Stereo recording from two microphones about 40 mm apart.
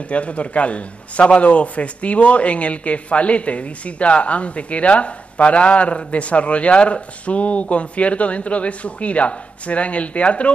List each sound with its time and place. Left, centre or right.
0.1 s a man's voice: left